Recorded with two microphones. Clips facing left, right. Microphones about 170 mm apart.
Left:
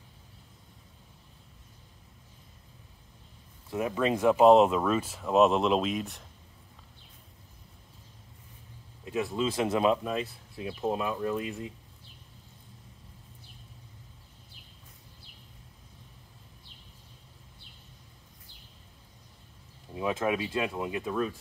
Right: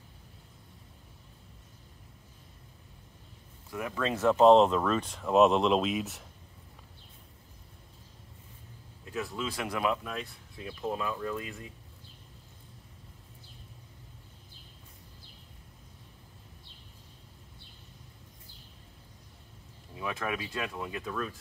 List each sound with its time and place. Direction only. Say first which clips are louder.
3.7 s speech: left 5 dB; 20° left (ahead or behind); by 6.2 s 5° right (ahead or behind)
9.1 s speech: left 6 dB; 20° left (ahead or behind)
20.0 s speech: left 6 dB; 25° left (ahead or behind)